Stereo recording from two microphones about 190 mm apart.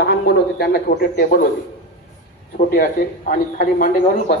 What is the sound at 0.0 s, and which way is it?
Speech, 60° left (ahead or behind).